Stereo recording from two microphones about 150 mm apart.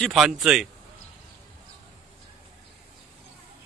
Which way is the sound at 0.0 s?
Centre (ahead or behind).